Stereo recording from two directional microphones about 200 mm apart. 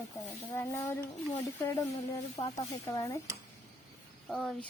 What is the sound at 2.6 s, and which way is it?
Speech, 15° left (ahead or behind).